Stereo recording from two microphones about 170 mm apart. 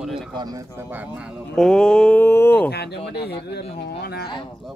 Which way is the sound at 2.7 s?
70° left (ahead or behind).